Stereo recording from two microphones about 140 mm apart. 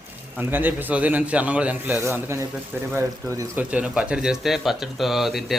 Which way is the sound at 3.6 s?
10° right (ahead or behind).